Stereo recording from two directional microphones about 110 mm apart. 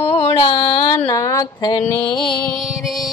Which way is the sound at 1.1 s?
30° left (ahead or behind).